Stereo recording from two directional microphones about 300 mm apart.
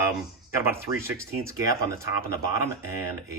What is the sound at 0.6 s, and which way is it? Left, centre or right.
Speech, centre.